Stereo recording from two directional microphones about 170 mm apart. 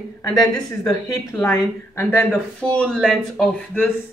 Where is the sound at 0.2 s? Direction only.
25° left (ahead or behind).